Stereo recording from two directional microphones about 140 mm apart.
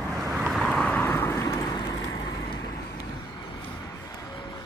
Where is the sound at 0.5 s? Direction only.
5° left (ahead or behind); by 2.2 s 25° left (ahead or behind).